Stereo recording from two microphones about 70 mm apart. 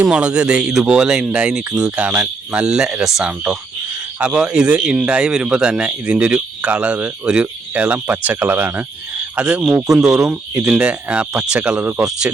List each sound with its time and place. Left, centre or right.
0.0 s speech: centre
4.2 s speech: centre